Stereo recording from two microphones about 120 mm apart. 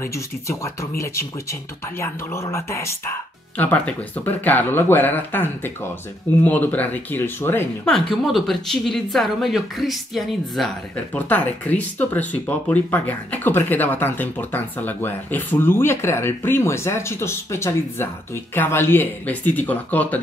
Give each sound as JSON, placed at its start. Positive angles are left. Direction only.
{"t": 0.0, "sound": "speech", "side_deg": 25}
{"t": 8.2, "sound": "a woman's voice", "side_deg": 0}
{"t": 11.1, "sound": "speech", "side_deg": 15}